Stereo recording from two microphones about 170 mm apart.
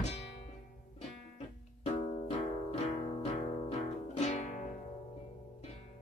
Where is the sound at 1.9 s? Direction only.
40° left (ahead or behind).